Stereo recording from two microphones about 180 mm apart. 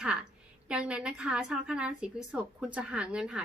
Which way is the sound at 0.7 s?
5° right (ahead or behind).